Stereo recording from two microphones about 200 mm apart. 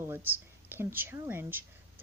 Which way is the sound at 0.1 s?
10° right (ahead or behind).